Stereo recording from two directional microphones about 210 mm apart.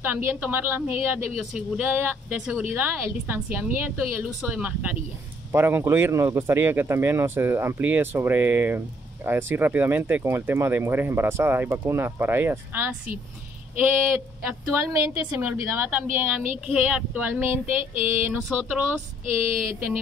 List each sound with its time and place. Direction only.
0.0 s speech: 10° right (ahead or behind)